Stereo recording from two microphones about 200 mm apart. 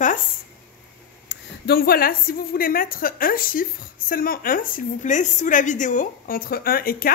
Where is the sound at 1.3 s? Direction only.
50° left (ahead or behind).